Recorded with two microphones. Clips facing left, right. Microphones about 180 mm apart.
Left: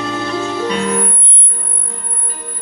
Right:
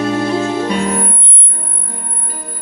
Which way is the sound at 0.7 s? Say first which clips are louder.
Right 1 dB; 45° right (ahead or behind).